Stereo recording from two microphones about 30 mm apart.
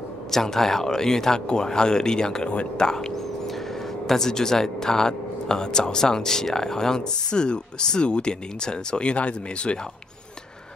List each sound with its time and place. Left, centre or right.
0.3 s speech: centre
4.1 s speech: centre; by 9.8 s left